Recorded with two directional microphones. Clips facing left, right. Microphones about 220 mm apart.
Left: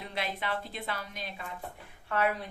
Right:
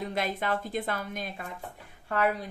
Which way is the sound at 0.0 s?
45° right (ahead or behind).